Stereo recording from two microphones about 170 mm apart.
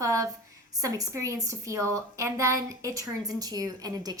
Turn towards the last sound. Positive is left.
turn(degrees=-20)  # may be behind; listen again after turning